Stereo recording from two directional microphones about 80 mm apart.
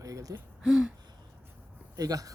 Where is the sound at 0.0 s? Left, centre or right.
Right.